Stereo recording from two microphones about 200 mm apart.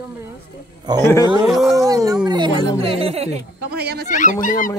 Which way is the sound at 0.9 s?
20° right (ahead or behind).